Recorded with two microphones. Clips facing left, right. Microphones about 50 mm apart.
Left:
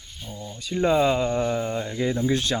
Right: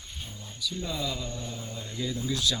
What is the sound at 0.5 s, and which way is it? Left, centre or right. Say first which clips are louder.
Speech: left 13 dB; left.